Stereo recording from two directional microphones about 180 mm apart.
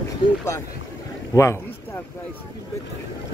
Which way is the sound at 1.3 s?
15° left (ahead or behind).